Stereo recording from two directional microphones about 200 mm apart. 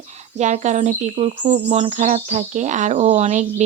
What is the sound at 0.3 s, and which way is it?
Speech, 35° right (ahead or behind).